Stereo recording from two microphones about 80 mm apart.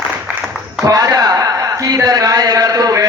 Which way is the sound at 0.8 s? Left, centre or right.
Right.